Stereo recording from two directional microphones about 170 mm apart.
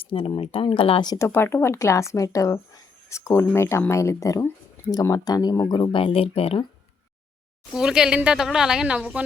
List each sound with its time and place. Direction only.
0.0 s speech: 30° left (ahead or behind)
7.7 s a woman's voice: 5° right (ahead or behind)